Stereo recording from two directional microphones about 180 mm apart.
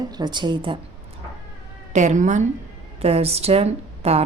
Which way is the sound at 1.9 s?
40° right (ahead or behind).